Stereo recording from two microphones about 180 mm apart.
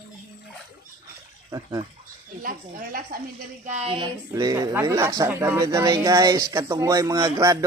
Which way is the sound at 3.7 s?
35° right (ahead or behind).